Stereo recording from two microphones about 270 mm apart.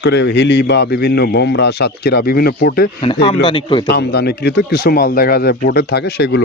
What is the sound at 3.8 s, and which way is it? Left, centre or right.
Speech, left.